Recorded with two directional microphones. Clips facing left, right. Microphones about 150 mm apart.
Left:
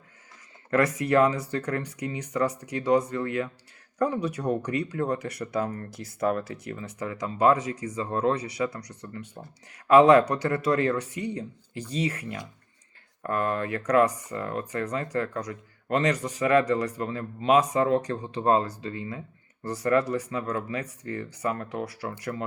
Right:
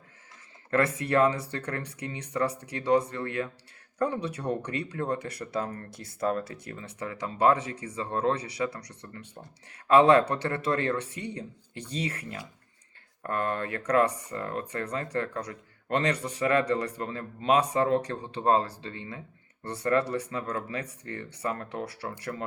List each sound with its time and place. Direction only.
0.7 s speech: 30° right (ahead or behind)
5.6 s speech: 30° left (ahead or behind)
5.9 s speech: 30° right (ahead or behind)